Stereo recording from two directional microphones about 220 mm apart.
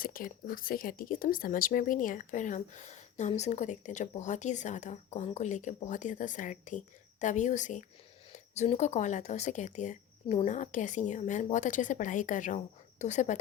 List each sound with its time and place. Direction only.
0.0 s speech: 40° left (ahead or behind)